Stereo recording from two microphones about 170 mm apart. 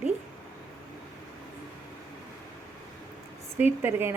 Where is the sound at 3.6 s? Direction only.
10° right (ahead or behind).